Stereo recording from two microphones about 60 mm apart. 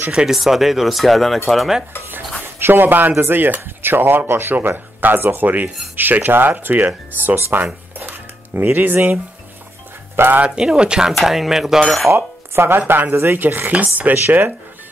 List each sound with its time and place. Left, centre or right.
0.1 s speech: centre
0.4 s speech: centre
2.4 s speech: right
8.0 s cutlery: right
10.1 s speech: right
10.6 s speech: centre
12.1 s speech: right
14.0 s speech: right